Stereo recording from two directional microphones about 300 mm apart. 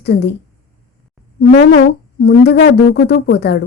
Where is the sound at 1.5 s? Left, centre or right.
Left.